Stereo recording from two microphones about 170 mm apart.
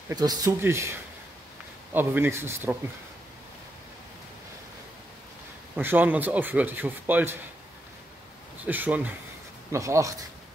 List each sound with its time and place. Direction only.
0.1 s a man's voice: 20° right (ahead or behind)
2.0 s a man's voice: 10° right (ahead or behind)
5.8 s a man's voice: 10° right (ahead or behind)
8.6 s a man's voice: 10° right (ahead or behind)